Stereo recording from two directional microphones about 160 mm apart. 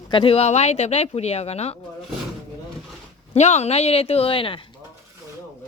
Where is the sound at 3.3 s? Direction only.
45° left (ahead or behind).